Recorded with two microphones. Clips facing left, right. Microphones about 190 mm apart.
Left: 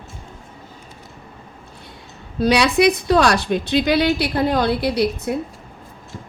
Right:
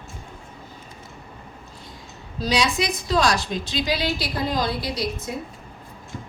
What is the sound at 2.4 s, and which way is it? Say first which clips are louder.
A woman's voice: left 7 dB; 65° left (ahead or behind).